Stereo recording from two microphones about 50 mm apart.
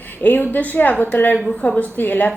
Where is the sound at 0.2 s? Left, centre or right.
Left.